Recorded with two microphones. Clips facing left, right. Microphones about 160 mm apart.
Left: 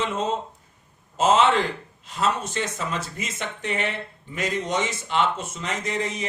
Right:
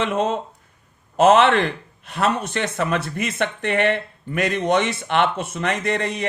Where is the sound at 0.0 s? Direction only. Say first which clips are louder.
Right 4 dB; 65° right (ahead or behind).